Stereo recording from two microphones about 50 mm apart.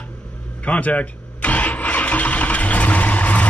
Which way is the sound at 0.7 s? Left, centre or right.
Left.